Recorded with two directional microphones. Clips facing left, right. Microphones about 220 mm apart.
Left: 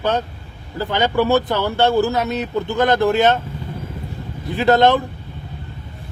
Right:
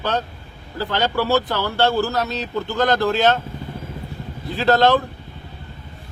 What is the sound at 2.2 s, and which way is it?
Speech, 55° left (ahead or behind).